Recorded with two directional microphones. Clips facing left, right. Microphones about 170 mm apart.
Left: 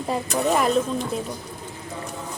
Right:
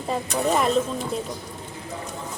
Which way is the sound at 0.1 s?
Centre (ahead or behind).